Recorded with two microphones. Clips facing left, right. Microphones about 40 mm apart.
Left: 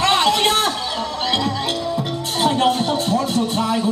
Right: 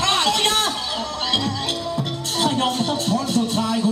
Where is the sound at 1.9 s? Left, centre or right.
Centre.